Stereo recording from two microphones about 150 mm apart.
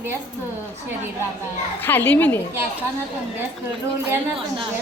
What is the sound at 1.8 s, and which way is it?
Speech, 15° left (ahead or behind).